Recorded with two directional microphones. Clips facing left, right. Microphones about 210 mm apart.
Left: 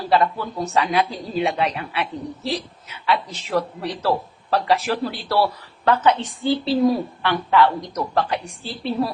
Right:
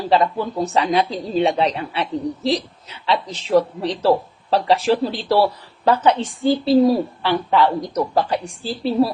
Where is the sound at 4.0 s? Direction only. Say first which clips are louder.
Right 6 dB; 10° right (ahead or behind).